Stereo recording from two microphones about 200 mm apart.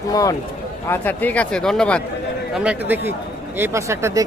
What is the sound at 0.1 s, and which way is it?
Speech, 15° left (ahead or behind).